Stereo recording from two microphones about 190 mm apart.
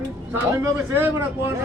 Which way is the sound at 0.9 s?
10° right (ahead or behind).